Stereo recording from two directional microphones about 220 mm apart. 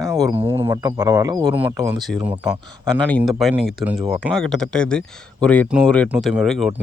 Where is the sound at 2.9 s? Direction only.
5° left (ahead or behind).